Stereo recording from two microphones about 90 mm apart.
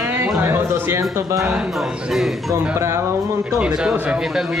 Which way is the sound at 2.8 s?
30° right (ahead or behind).